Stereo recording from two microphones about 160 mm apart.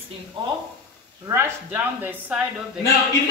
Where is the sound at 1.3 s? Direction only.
10° right (ahead or behind).